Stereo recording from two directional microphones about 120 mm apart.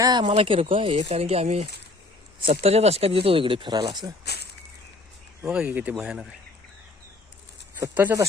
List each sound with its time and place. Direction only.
0.0 s speech: 40° right (ahead or behind)
5.4 s speech: 10° right (ahead or behind)
7.9 s speech: 15° right (ahead or behind)